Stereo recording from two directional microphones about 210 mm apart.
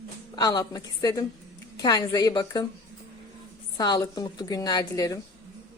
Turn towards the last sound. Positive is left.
turn(degrees=15)  # may be behind; listen again after turning